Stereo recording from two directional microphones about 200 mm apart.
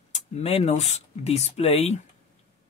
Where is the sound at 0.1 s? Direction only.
30° left (ahead or behind).